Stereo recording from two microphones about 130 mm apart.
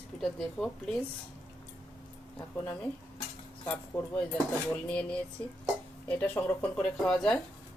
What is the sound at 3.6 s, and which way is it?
Speech, 15° left (ahead or behind).